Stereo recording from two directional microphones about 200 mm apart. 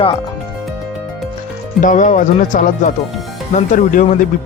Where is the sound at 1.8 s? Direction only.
40° left (ahead or behind).